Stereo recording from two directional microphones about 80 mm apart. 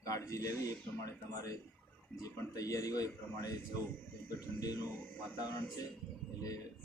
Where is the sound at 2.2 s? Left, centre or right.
Left.